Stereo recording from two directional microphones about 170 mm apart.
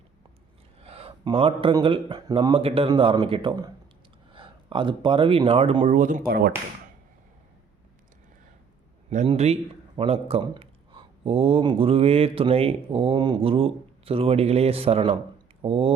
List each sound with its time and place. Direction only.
0.8 s a man's voice: 35° right (ahead or behind)
6.0 s speech: 50° right (ahead or behind)
9.0 s a man's voice: 40° right (ahead or behind)